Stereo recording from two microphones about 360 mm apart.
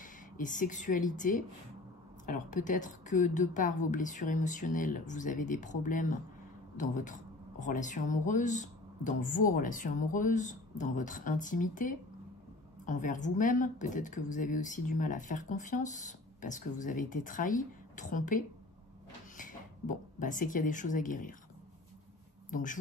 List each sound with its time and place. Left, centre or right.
0.0 s speech: left
22.5 s speech: left